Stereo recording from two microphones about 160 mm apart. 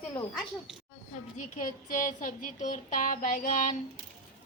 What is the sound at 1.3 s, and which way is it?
Speech, 55° left (ahead or behind).